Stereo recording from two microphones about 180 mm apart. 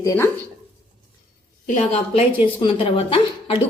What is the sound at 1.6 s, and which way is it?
A woman's voice, 40° left (ahead or behind).